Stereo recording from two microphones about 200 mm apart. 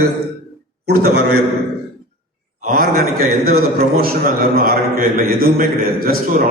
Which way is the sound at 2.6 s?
45° right (ahead or behind).